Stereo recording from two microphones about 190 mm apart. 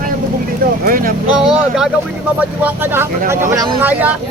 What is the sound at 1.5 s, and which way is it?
Speech, 5° right (ahead or behind).